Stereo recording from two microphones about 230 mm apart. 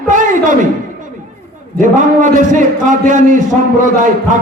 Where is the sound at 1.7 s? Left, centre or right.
Right.